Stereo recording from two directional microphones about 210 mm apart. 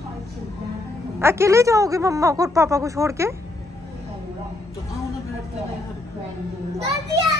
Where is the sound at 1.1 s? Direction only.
10° right (ahead or behind).